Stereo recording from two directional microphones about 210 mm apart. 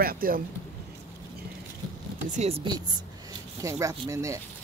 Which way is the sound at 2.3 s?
30° right (ahead or behind).